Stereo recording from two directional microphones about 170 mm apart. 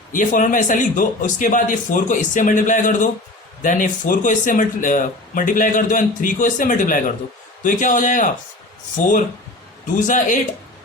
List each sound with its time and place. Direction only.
0.1 s speech: 50° left (ahead or behind)